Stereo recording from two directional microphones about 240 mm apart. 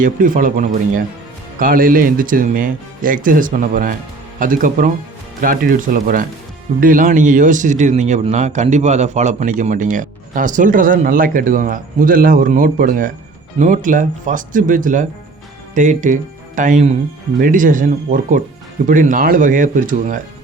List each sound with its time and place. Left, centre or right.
0.0 s speech: right